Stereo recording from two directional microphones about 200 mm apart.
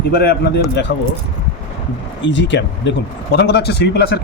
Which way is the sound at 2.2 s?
65° left (ahead or behind).